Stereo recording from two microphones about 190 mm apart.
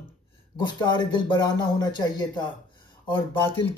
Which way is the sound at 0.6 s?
20° left (ahead or behind).